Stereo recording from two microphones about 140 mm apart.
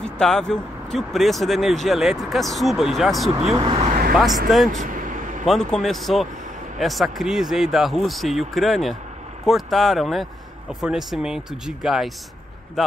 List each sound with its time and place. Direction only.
0.0 s speech: 5° left (ahead or behind)
3.5 s speech: 40° right (ahead or behind)
3.9 s vehicle: 90° right
4.8 s vehicle: 70° right (ahead or behind)
5.4 s speech: 5° left (ahead or behind)